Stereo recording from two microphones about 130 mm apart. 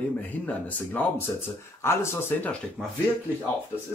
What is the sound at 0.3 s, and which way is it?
Speech, 10° left (ahead or behind).